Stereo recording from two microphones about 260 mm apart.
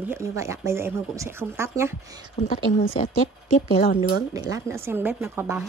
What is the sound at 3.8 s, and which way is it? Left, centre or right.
Speech, left.